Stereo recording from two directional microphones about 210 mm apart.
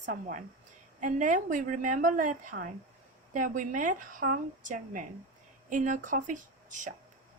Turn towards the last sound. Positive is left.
turn(degrees=-35)  # may be behind; listen again after turning